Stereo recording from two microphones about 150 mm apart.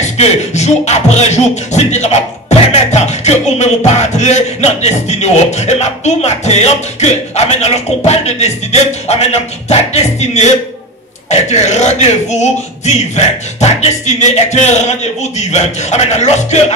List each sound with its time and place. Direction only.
0.0 s music: 50° left (ahead or behind)